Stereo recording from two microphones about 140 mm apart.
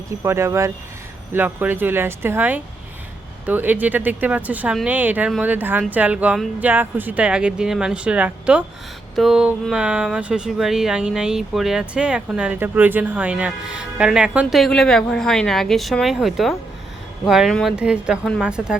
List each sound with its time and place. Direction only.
0.2 s speech: 20° right (ahead or behind)